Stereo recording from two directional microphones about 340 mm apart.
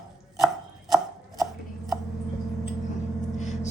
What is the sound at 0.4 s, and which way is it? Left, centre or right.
Chopping, centre.